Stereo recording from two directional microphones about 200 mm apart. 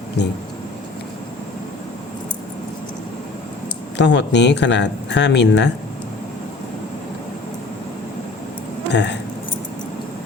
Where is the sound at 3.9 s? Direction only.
60° left (ahead or behind).